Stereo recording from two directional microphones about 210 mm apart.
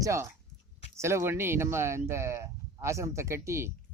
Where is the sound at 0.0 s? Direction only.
15° right (ahead or behind).